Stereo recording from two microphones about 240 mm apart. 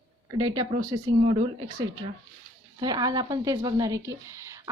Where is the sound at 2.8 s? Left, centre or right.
Centre.